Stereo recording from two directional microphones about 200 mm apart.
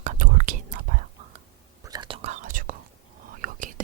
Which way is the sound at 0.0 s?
40° right (ahead or behind).